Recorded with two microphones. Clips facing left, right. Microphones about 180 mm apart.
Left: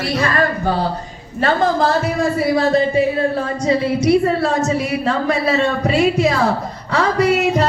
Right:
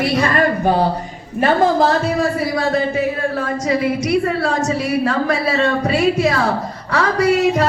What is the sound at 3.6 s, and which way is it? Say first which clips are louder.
A woman's voice: left 3 dB; 30° left (ahead or behind).